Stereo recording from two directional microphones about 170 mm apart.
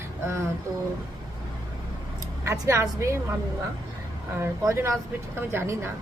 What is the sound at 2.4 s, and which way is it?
Speech, 15° right (ahead or behind).